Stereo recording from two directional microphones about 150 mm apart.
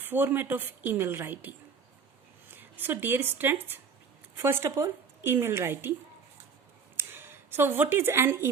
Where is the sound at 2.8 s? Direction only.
15° right (ahead or behind).